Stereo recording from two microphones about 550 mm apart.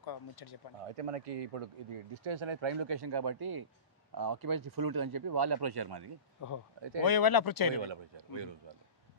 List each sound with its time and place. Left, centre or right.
0.0 s speech: left
0.8 s speech: right
6.4 s speech: left
7.8 s a man's voice: right